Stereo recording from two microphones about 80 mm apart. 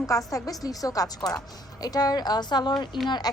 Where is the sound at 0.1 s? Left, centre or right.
Left.